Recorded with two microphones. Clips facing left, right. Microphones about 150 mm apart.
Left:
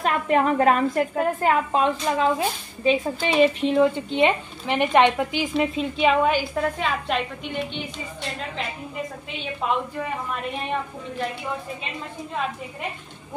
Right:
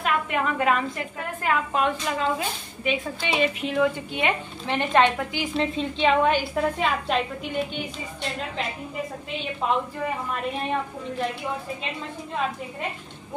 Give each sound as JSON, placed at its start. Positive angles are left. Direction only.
{"t": 0.0, "sound": "a woman's voice", "side_deg": 40}
{"t": 5.6, "sound": "a woman's voice", "side_deg": 5}